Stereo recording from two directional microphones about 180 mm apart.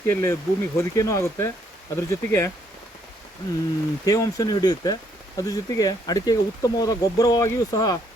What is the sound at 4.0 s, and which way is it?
Speech, 20° left (ahead or behind).